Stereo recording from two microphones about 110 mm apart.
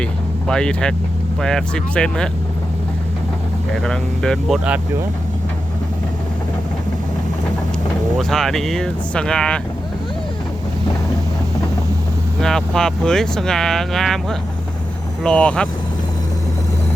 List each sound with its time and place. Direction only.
0.0 s speech: 5° left (ahead or behind)
3.8 s speech: 5° left (ahead or behind)
8.2 s speech: 5° left (ahead or behind)
12.4 s speech: 5° left (ahead or behind)